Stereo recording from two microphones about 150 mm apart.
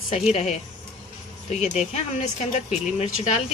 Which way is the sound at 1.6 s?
50° left (ahead or behind).